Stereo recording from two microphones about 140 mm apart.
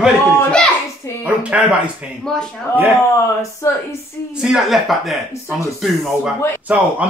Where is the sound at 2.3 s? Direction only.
5° left (ahead or behind).